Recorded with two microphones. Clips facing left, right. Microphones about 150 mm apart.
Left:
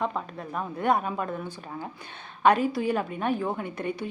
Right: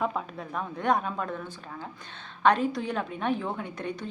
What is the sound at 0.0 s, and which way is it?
A woman's voice, centre (ahead or behind).